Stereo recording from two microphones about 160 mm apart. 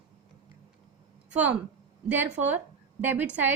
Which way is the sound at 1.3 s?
10° right (ahead or behind).